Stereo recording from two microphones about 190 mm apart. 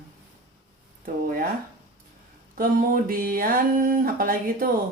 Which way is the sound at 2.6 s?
50° right (ahead or behind).